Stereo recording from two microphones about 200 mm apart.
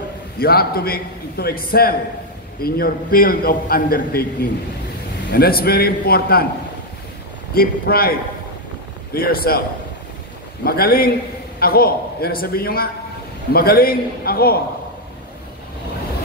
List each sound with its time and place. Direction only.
0.4 s a man's voice: 50° left (ahead or behind)
5.3 s a man's voice: 50° left (ahead or behind)
7.5 s a man's voice: 50° left (ahead or behind)
9.1 s a man's voice: 50° left (ahead or behind)
10.6 s a man's voice: 50° left (ahead or behind)